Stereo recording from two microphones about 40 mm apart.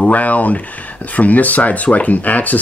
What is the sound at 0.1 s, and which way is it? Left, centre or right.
Speech, left.